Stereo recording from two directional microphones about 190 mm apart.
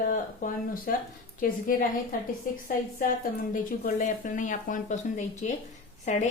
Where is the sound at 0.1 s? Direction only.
45° left (ahead or behind).